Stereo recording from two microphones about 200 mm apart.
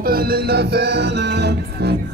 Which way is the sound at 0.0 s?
50° right (ahead or behind).